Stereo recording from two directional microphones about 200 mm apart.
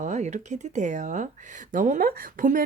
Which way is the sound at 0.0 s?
35° right (ahead or behind).